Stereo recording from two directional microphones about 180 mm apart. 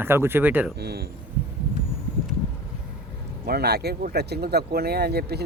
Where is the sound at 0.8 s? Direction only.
65° right (ahead or behind).